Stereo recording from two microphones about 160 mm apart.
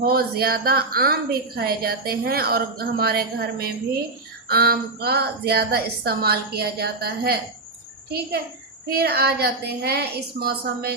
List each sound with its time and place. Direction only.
0.0 s a woman's voice: 70° right (ahead or behind)
8.9 s a woman's voice: 75° right (ahead or behind)